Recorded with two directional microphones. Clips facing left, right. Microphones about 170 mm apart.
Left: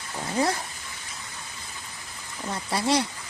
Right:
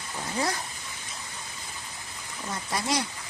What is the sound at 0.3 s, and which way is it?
Speech, 25° left (ahead or behind).